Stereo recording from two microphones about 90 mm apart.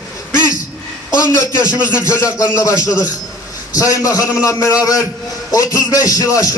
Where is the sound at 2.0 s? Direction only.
35° left (ahead or behind).